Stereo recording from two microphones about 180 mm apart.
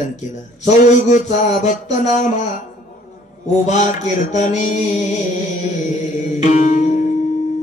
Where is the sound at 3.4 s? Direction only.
40° left (ahead or behind).